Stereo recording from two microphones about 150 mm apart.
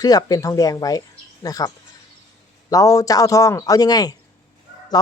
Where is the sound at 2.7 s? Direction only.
25° left (ahead or behind).